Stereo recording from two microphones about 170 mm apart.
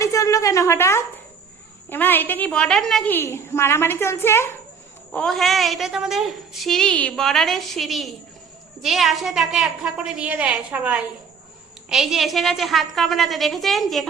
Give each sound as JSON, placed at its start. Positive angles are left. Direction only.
{"t": 0.0, "sound": "a sound", "side_deg": 20}
{"t": 1.9, "sound": "a woman's voice", "side_deg": 10}
{"t": 5.1, "sound": "a woman's voice", "side_deg": 0}